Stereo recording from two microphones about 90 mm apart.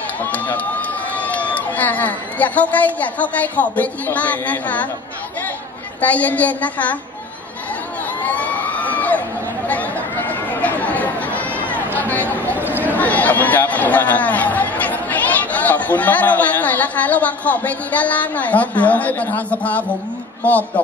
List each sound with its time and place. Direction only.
0.2 s speech: 15° left (ahead or behind)
5.9 s speech: 15° left (ahead or behind)
8.2 s crowd: 15° left (ahead or behind)
9.7 s chatter: 20° left (ahead or behind)
12.5 s a sound: 20° right (ahead or behind)
12.8 s speech: 20° left (ahead or behind)